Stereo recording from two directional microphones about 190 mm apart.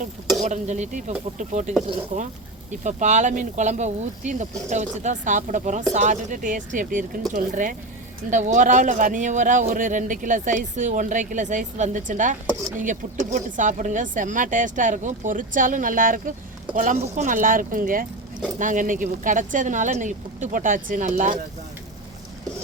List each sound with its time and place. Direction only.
0.4 s speech: 40° right (ahead or behind)